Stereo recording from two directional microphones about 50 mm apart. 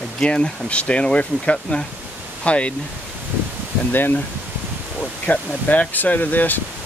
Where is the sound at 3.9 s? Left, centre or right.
Left.